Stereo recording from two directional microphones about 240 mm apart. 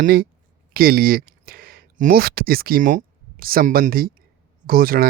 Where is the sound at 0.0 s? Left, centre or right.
Right.